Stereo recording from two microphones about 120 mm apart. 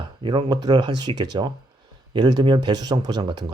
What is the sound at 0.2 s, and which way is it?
Speech, 45° right (ahead or behind).